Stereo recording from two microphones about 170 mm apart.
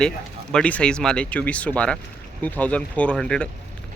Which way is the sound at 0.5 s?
5° left (ahead or behind).